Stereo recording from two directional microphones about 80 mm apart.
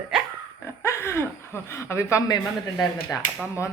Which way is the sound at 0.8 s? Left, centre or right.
Left.